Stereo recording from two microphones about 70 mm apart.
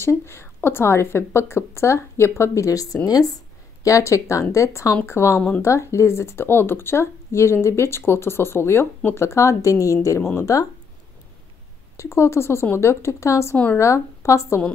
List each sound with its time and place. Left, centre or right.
0.0 s speech: left
3.8 s speech: left
12.0 s speech: left